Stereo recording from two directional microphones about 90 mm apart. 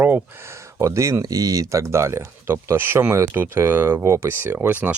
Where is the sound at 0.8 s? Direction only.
35° right (ahead or behind).